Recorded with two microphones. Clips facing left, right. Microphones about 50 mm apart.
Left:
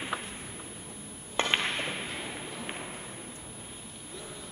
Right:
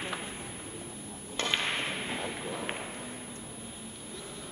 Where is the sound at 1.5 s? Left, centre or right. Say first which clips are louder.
Left 1 dB; centre.